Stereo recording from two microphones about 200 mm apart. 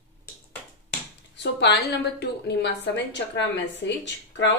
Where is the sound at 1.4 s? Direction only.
60° left (ahead or behind).